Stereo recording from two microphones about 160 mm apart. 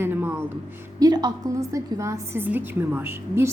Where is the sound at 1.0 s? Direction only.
25° right (ahead or behind).